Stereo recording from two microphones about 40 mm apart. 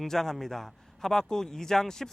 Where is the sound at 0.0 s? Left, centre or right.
Centre.